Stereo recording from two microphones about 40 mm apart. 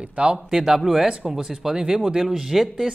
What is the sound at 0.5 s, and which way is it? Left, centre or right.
Speech, centre.